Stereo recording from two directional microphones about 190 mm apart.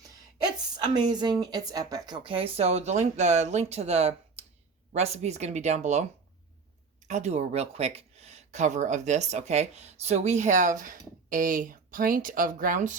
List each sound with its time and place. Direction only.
0.3 s a sound: 20° right (ahead or behind)
1.4 s speech: 20° right (ahead or behind); by 6.1 s 35° right (ahead or behind)
7.1 s speech: 35° right (ahead or behind)